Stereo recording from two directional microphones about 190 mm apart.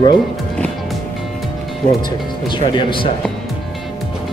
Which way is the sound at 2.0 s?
25° left (ahead or behind).